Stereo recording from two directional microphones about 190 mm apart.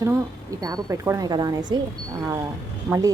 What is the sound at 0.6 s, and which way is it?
A woman's voice, 20° right (ahead or behind).